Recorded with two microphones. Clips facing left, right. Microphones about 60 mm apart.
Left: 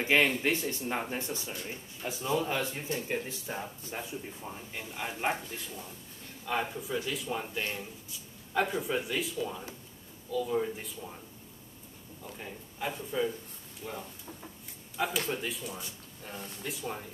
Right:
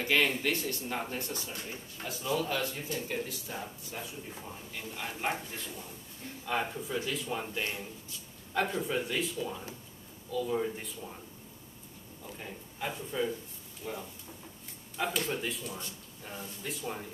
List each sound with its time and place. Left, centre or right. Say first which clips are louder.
0.4 s speech: left 2 dB; left
4.5 s speech: left 1 dB; centre
12.4 s speech: left 1 dB; centre